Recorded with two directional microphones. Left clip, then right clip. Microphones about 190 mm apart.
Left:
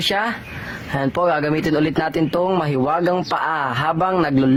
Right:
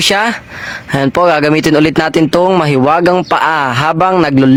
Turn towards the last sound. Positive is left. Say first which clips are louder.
# right 8 dB
turn(degrees=-50)  # may be behind; listen again after turning